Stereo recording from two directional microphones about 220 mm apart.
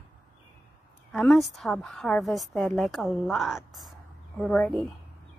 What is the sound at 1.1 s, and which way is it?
A woman's voice, centre (ahead or behind).